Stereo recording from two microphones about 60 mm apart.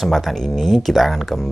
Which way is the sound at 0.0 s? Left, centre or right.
Centre.